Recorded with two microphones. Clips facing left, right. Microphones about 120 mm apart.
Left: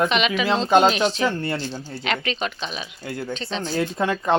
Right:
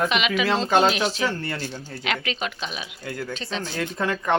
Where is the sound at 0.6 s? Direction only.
20° left (ahead or behind).